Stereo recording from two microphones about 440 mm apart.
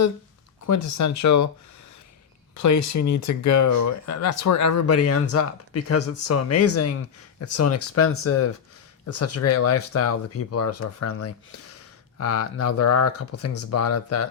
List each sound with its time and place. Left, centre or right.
0.7 s speech: left
2.6 s speech: left